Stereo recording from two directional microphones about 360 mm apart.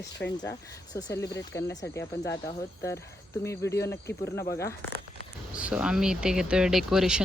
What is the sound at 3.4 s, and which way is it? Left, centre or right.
Speech, centre.